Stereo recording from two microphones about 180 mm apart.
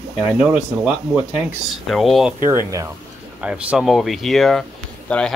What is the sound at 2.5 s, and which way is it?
Speech, 15° right (ahead or behind).